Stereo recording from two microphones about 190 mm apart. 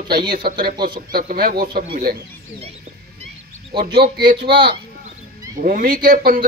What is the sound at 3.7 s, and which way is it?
Speech, 50° right (ahead or behind).